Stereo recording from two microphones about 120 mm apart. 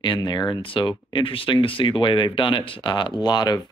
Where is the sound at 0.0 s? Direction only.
40° left (ahead or behind).